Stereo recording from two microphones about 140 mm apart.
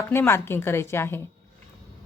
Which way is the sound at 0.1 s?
15° left (ahead or behind).